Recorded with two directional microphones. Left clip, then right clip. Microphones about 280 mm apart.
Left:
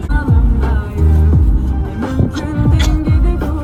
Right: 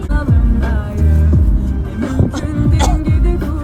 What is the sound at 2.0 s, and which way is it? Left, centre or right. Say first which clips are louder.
Music: even; right.